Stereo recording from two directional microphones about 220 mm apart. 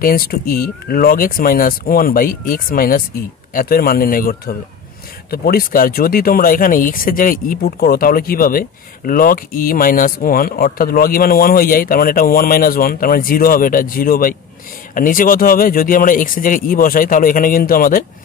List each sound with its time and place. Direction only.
0.0 s speech: 40° left (ahead or behind)